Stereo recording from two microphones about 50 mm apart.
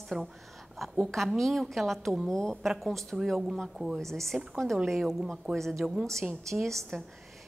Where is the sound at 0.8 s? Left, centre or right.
Centre.